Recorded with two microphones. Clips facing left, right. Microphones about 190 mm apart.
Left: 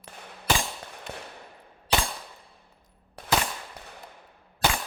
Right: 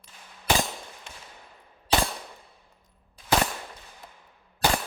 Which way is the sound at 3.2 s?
65° left (ahead or behind).